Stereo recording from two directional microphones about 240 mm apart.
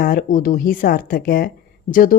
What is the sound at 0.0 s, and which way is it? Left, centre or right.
Speech, left.